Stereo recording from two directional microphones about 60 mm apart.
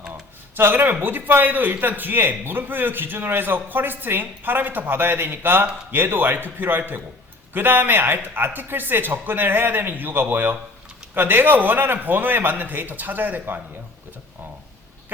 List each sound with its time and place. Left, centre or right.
0.1 s a man's voice: right